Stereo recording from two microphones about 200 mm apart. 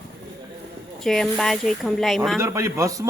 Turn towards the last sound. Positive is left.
turn(degrees=-15)  # may be behind; listen again after turning